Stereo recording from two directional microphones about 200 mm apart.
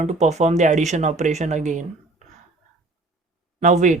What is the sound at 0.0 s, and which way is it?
Speech, 35° right (ahead or behind).